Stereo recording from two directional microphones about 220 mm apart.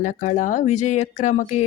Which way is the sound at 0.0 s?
35° left (ahead or behind).